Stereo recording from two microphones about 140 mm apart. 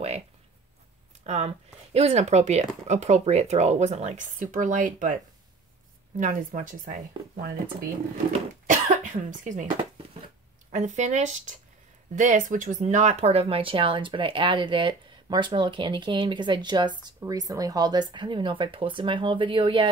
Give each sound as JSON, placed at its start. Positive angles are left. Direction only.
{"t": 1.2, "sound": "speech", "side_deg": -50}
{"t": 8.3, "sound": "cough", "side_deg": -60}
{"t": 10.7, "sound": "speech", "side_deg": -60}
{"t": 12.8, "sound": "speech", "side_deg": -55}